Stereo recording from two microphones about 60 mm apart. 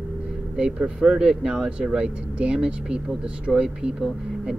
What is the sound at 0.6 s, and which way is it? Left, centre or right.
Speech, centre.